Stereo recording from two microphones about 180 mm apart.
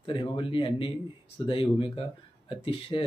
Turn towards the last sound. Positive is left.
turn(degrees=30)  # may be behind; listen again after turning